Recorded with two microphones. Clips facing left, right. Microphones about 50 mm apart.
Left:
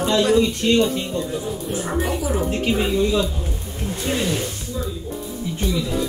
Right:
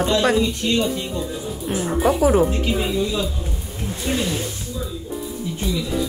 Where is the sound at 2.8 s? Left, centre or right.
Centre.